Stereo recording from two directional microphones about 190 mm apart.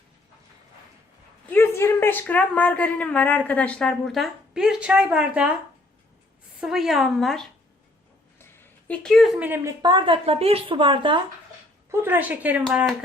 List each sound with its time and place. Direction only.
1.5 s a woman's voice: 10° left (ahead or behind); by 5.5 s 5° right (ahead or behind)
6.6 s a woman's voice: centre (ahead or behind)
9.8 s speech: 25° right (ahead or behind)
11.9 s speech: 10° right (ahead or behind)
12.6 s a woman's voice: 5° left (ahead or behind)